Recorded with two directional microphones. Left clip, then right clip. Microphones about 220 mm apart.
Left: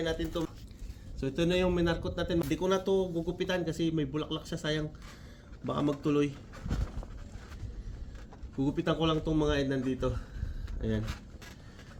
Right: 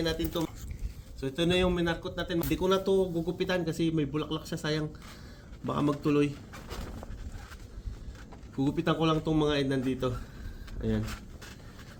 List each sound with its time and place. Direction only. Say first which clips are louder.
0.0 s speech: right 2 dB; 25° right (ahead or behind)
1.2 s speech: right 1 dB; 5° right (ahead or behind)
8.5 s speech: right 2 dB; 10° right (ahead or behind)